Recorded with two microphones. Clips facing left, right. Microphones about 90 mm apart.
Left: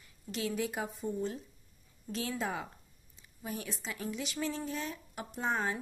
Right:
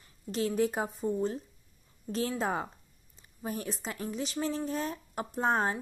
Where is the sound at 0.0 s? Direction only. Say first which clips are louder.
Right 5 dB; 40° right (ahead or behind).